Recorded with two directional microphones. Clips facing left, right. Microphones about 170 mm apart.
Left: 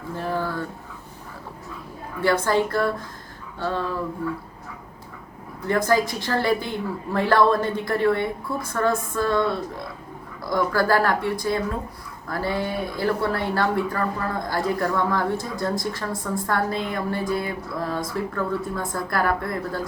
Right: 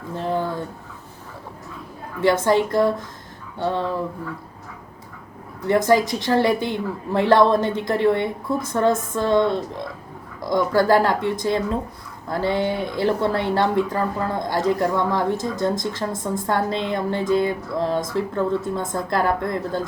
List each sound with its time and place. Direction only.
0.2 s a sound: 20° right (ahead or behind)
2.2 s a woman's voice: 20° right (ahead or behind)
5.6 s a woman's voice: 20° right (ahead or behind)